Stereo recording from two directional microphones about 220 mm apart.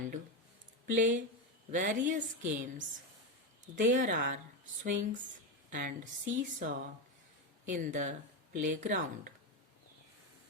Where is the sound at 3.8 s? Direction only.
35° right (ahead or behind).